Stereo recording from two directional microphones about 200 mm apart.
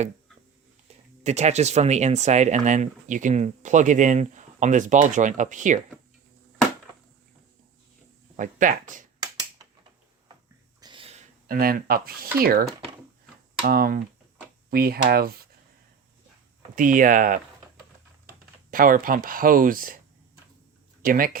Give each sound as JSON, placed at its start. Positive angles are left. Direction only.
{"t": 1.2, "sound": "speech", "side_deg": -35}
{"t": 8.4, "sound": "speech", "side_deg": -40}
{"t": 10.8, "sound": "a sound", "side_deg": -25}
{"t": 11.4, "sound": "speech", "side_deg": -45}
{"t": 13.7, "sound": "speech", "side_deg": -50}
{"t": 16.7, "sound": "speech", "side_deg": -40}
{"t": 21.0, "sound": "speech", "side_deg": -45}